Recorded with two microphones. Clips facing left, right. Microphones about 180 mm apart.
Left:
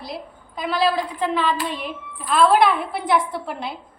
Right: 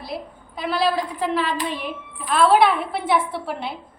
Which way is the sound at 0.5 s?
5° right (ahead or behind).